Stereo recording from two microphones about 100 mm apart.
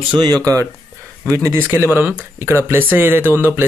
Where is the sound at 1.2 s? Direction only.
30° right (ahead or behind).